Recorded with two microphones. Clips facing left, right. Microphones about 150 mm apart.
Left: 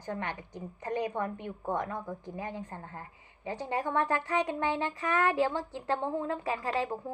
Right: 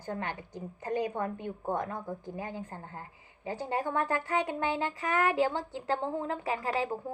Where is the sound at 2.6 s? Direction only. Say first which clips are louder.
Even; 30° right (ahead or behind).